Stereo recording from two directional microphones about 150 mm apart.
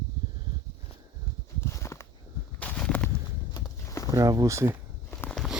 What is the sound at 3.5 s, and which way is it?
Walk, 25° left (ahead or behind).